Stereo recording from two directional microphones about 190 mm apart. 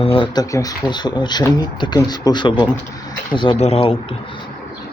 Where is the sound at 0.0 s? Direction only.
30° left (ahead or behind).